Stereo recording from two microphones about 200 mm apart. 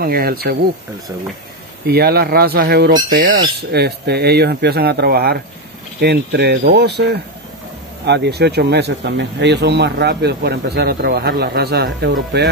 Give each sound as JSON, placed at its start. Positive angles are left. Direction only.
{"t": 0.0, "sound": "speech", "side_deg": -50}
{"t": 1.9, "sound": "speech", "side_deg": -50}